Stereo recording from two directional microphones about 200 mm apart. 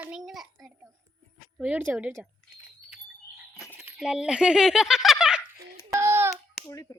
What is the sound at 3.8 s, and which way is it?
Speech, 5° right (ahead or behind).